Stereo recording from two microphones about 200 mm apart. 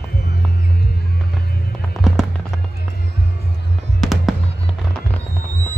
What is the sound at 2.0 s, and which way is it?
Fireworks, centre (ahead or behind).